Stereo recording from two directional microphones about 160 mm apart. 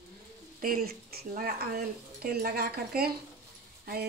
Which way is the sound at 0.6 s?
70° right (ahead or behind).